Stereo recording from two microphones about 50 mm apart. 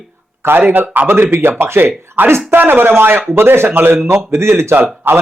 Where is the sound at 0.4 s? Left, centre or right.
Right.